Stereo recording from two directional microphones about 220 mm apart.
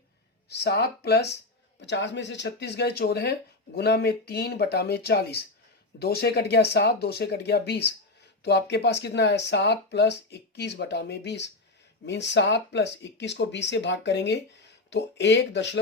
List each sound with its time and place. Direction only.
0.4 s speech: 50° left (ahead or behind)